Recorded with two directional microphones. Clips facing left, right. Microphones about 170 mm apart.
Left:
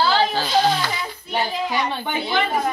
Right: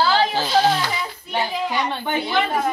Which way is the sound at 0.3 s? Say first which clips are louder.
Right 1 dB; 15° right (ahead or behind).